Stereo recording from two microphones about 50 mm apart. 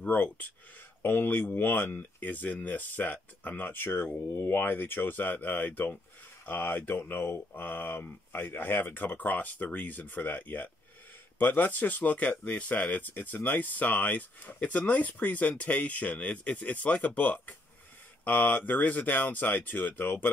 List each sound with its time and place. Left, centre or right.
0.0 s speech: left
1.0 s speech: left
4.3 s speech: left
4.6 s speech: left
6.4 s speech: left